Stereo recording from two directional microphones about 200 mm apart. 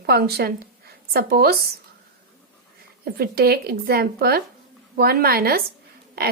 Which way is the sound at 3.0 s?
50° right (ahead or behind).